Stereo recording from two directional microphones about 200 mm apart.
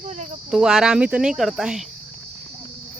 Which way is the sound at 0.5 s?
5° right (ahead or behind).